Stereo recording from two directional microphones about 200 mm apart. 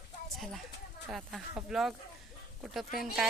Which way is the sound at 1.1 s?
Centre (ahead or behind).